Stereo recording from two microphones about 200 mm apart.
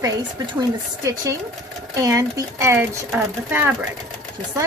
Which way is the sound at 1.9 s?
15° right (ahead or behind).